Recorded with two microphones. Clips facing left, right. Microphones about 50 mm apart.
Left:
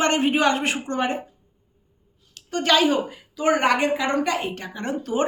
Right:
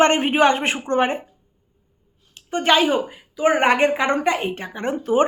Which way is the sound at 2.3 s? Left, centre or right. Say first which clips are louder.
Right 2 dB; right.